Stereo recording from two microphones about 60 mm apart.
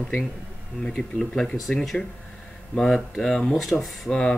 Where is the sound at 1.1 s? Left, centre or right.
Centre.